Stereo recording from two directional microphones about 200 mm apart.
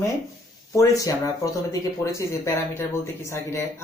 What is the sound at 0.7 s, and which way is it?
Speech, 15° left (ahead or behind).